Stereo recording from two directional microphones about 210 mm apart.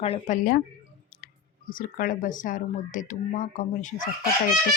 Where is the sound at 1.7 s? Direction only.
40° left (ahead or behind).